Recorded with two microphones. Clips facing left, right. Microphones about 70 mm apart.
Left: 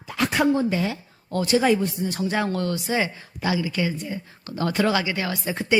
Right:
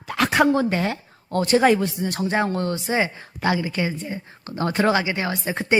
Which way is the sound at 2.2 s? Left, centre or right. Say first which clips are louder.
Right 2 dB; right.